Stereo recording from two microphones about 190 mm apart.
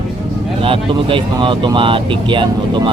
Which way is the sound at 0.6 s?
30° right (ahead or behind).